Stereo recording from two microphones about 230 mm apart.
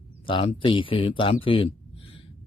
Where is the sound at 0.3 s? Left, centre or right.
Left.